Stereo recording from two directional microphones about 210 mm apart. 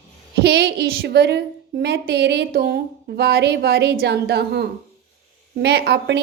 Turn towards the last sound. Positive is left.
turn(degrees=-55)  # may be behind; listen again after turning